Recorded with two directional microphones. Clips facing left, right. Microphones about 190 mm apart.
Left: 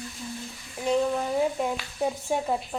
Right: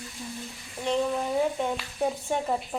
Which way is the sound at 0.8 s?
5° left (ahead or behind).